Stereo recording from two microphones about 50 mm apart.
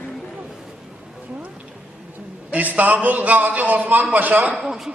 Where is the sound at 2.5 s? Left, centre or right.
Right.